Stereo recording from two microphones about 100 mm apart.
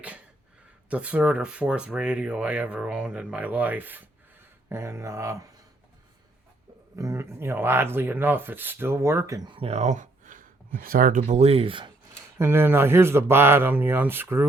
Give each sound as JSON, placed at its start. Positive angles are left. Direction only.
{"t": 0.9, "sound": "speech", "side_deg": -15}
{"t": 6.9, "sound": "speech", "side_deg": -30}
{"t": 9.5, "sound": "speech", "side_deg": -80}
{"t": 11.2, "sound": "speech", "side_deg": -85}
{"t": 12.4, "sound": "speech", "side_deg": -25}